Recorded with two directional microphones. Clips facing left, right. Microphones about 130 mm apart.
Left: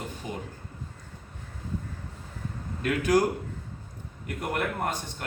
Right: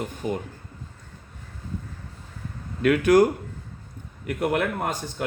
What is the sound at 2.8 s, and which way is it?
Speech, 70° right (ahead or behind).